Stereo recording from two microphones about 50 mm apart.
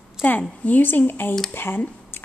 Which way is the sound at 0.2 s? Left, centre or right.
Left.